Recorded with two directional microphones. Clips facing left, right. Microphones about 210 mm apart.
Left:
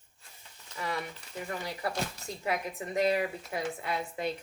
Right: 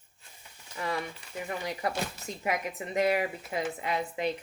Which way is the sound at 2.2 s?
20° right (ahead or behind).